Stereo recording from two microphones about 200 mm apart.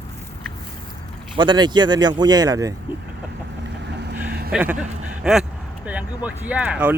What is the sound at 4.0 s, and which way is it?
Vehicle, 55° right (ahead or behind).